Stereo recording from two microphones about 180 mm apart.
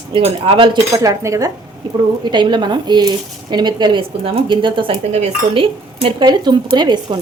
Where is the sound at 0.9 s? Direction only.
15° right (ahead or behind).